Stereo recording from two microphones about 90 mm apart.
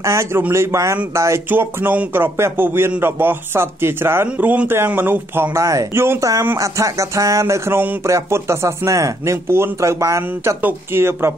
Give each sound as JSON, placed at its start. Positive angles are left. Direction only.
{"t": 0.0, "sound": "speech", "side_deg": -30}